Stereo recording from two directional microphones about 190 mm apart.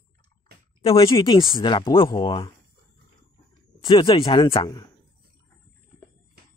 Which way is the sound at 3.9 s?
25° left (ahead or behind).